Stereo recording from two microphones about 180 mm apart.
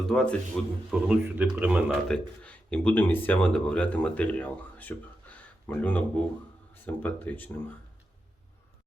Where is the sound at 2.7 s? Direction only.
10° left (ahead or behind).